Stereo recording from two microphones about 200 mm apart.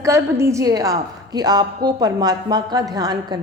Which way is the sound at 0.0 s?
15° right (ahead or behind).